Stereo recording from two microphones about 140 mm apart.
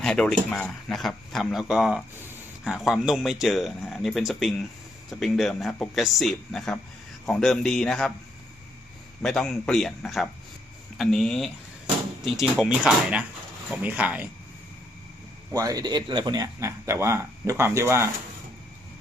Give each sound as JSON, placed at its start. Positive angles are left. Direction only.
{"t": 0.0, "sound": "speech", "side_deg": 5}
{"t": 2.1, "sound": "speech", "side_deg": -15}
{"t": 2.6, "sound": "speech", "side_deg": 0}
{"t": 9.2, "sound": "speech", "side_deg": 5}
{"t": 15.5, "sound": "speech", "side_deg": -25}